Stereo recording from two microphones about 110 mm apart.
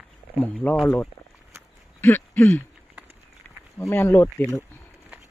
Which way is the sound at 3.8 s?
25° left (ahead or behind).